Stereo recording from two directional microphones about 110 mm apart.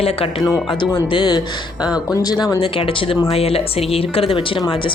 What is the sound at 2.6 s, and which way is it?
A woman's voice, 55° left (ahead or behind).